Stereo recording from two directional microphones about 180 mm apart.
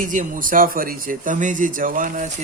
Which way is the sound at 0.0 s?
45° right (ahead or behind).